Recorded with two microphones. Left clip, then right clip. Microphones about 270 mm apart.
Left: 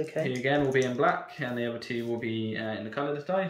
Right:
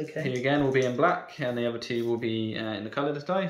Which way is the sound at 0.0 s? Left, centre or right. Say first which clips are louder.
Left 1 dB; centre.